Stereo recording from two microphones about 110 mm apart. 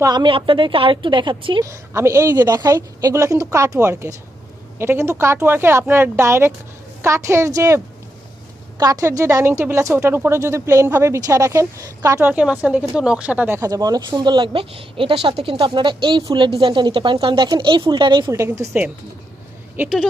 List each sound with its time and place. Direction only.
0.0 s speech: 40° right (ahead or behind)
1.6 s a woman's voice: 25° right (ahead or behind)
2.4 s a woman's voice: 35° right (ahead or behind)
8.8 s a woman's voice: 30° right (ahead or behind)
12.2 s speech: 10° right (ahead or behind)
13.6 s speech: 35° right (ahead or behind)
18.3 s a woman's voice: 30° right (ahead or behind)